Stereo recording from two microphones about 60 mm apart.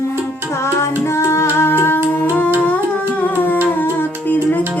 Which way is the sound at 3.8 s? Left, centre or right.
Left.